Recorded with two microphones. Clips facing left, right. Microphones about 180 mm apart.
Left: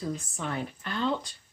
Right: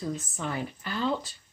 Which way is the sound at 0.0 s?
Centre (ahead or behind).